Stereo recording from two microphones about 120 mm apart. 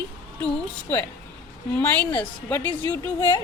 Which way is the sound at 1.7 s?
15° left (ahead or behind).